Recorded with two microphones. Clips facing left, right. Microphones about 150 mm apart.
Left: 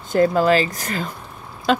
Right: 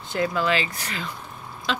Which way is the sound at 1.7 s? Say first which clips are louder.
Left 9 dB; 50° left (ahead or behind).